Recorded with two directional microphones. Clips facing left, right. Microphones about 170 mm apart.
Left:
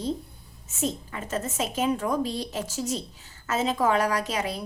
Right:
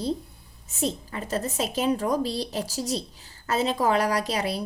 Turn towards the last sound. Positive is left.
turn(degrees=-35)  # may be behind; listen again after turning